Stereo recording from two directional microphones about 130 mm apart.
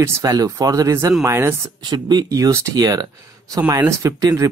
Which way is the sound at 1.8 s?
30° right (ahead or behind).